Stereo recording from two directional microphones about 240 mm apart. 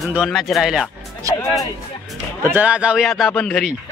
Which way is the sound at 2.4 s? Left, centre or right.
Centre.